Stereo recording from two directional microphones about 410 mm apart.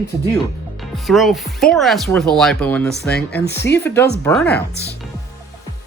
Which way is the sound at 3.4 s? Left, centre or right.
Left.